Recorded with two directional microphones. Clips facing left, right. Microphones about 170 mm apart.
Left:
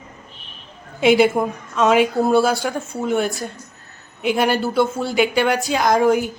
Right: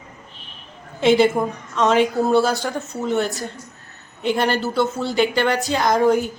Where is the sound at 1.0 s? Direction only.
10° left (ahead or behind).